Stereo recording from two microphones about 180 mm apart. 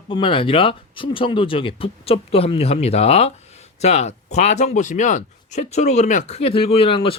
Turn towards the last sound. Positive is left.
turn(degrees=30)  # may be behind; listen again after turning